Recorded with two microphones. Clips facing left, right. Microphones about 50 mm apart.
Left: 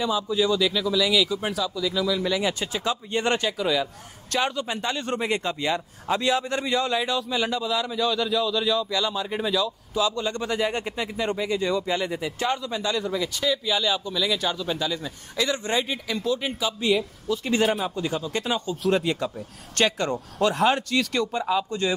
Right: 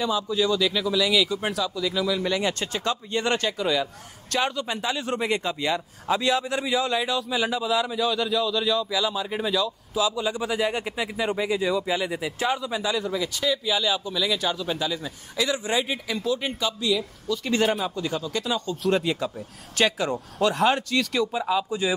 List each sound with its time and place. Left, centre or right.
0.0 s a man's voice: centre
3.1 s speech: left
3.3 s a man's voice: centre
17.3 s speech: centre
17.9 s speech: left
18.7 s a man's voice: centre